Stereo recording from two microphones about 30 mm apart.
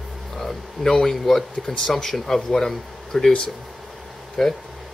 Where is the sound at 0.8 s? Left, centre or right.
Centre.